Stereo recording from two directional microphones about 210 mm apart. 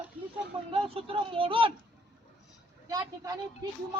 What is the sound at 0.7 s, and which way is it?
Speech, 25° right (ahead or behind).